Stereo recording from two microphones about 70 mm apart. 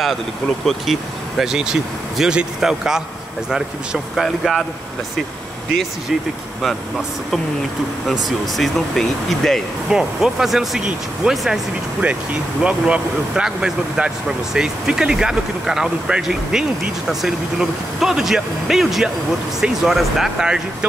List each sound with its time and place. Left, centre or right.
0.7 s speech: centre
1.4 s speech: centre
8.5 s speech: centre
9.9 s speech: centre
12.0 s speech: centre